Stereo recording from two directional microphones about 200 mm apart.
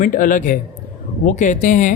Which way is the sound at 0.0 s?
40° left (ahead or behind).